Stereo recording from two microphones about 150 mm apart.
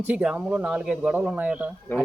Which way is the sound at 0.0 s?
10° right (ahead or behind).